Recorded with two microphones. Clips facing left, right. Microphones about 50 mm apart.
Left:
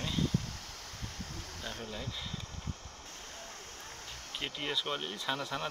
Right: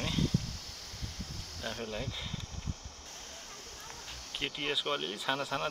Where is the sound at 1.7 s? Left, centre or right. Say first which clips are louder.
Right 4 dB; right.